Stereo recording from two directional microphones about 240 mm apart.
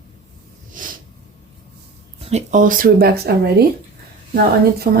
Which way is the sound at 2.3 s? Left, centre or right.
Right.